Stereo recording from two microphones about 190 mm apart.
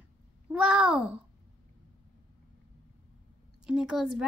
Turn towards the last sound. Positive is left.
turn(degrees=-5)  # may be behind; listen again after turning